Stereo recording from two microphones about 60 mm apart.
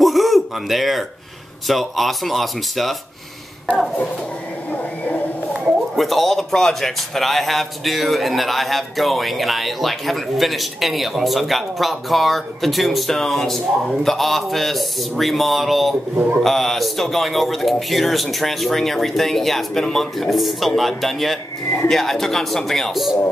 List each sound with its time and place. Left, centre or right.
0.0 s a sound: centre
1.7 s speech: centre
4.6 s speech: left
5.5 s speech: centre